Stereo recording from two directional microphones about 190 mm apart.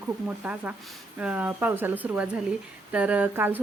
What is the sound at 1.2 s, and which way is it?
A woman's voice, 10° right (ahead or behind).